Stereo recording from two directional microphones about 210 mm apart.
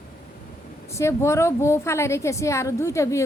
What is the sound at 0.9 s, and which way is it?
Speech, 15° left (ahead or behind).